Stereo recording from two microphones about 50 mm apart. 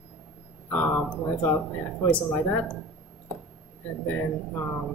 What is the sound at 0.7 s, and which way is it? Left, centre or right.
Speech, left.